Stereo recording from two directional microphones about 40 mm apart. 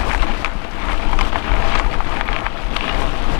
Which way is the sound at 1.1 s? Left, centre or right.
Left.